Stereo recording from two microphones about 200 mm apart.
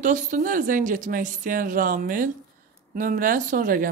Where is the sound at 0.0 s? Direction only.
40° right (ahead or behind).